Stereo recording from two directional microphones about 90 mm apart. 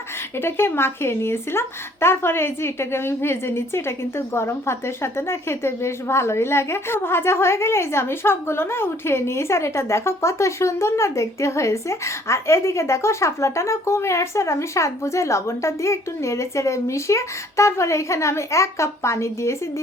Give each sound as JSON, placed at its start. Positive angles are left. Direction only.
{"t": 0.3, "sound": "a woman's voice", "side_deg": 25}